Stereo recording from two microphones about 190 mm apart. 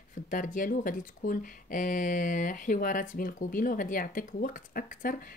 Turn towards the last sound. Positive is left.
turn(degrees=45)  # may be behind; listen again after turning